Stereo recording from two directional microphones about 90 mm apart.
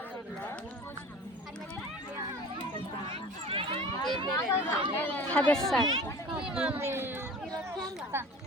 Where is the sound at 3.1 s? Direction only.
90° right.